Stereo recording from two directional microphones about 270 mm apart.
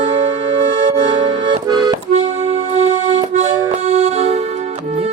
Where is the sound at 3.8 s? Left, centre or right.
Right.